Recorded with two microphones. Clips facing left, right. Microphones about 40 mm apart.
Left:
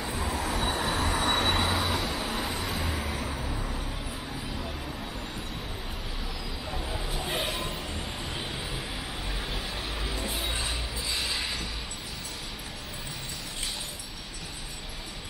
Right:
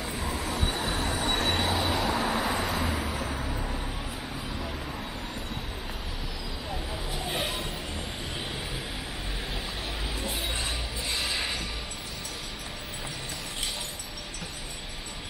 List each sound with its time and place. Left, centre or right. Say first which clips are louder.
0.0 s train: left 1 dB; centre
2.1 s vehicle: right 4 dB; centre
2.6 s vehicle: right 3 dB; centre
3.2 s vehicle: right 2 dB; right
7.2 s a sound: even; centre
10.1 s a sound: even; centre
11.1 s train: right 2 dB; centre